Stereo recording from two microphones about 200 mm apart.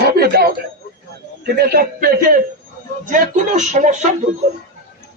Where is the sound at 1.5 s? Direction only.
50° right (ahead or behind).